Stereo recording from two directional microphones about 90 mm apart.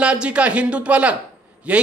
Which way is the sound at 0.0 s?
10° right (ahead or behind).